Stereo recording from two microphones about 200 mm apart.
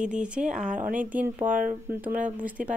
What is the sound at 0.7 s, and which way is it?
Speech, 40° right (ahead or behind).